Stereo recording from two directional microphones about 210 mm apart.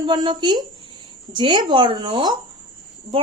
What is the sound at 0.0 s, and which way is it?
A woman's voice, 20° right (ahead or behind).